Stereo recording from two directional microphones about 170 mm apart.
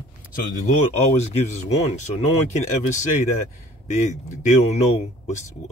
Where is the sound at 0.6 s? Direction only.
40° left (ahead or behind).